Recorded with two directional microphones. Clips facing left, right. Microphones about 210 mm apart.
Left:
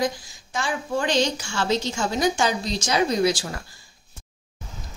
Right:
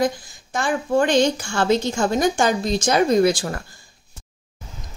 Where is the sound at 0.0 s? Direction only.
55° right (ahead or behind).